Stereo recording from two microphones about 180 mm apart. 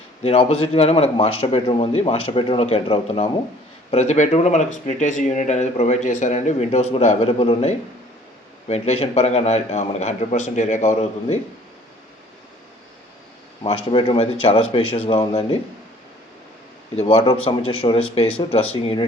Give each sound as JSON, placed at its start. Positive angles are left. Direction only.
{"t": 0.2, "sound": "speech", "side_deg": 35}
{"t": 13.7, "sound": "speech", "side_deg": 30}
{"t": 16.9, "sound": "speech", "side_deg": 35}